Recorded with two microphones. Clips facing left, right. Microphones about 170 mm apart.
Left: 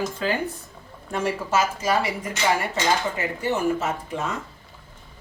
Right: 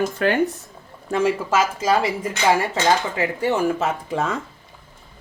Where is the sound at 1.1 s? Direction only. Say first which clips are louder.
Right 4 dB; 90° right.